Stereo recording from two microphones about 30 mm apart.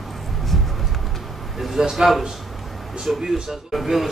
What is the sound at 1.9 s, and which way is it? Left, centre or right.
A man's voice, centre.